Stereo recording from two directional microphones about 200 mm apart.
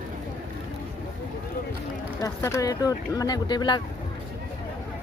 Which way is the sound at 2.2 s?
15° left (ahead or behind).